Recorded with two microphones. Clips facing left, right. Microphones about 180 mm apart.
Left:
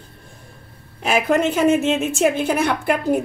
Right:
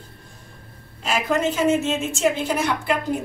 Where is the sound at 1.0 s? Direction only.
60° left (ahead or behind).